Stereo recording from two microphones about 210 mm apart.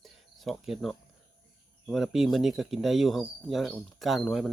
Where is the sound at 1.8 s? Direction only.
Centre (ahead or behind).